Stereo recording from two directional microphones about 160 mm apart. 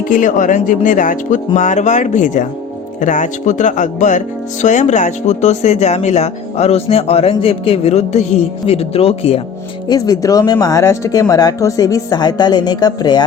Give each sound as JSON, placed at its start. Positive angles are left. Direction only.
{"t": 0.1, "sound": "speech", "side_deg": 50}
{"t": 9.9, "sound": "speech", "side_deg": 25}